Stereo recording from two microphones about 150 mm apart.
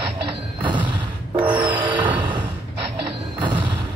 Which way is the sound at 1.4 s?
30° right (ahead or behind).